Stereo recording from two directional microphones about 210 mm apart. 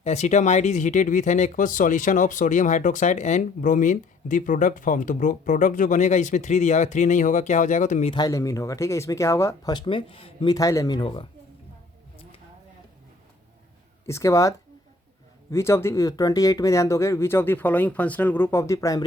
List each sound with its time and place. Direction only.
0.0 s speech: 30° left (ahead or behind)
8.1 s speech: 20° left (ahead or behind)
14.1 s speech: 15° left (ahead or behind)